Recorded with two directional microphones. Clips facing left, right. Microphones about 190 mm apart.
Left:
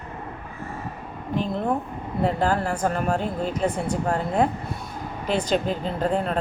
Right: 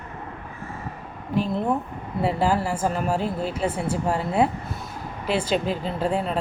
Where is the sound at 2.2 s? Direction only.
5° right (ahead or behind).